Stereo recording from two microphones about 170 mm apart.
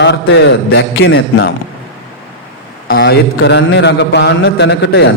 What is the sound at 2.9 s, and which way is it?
A man's voice, 75° left (ahead or behind).